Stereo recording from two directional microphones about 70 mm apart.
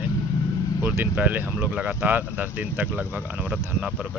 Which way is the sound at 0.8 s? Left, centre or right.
Right.